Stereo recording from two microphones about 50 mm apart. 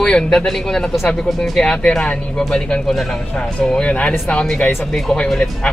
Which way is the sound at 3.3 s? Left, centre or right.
Centre.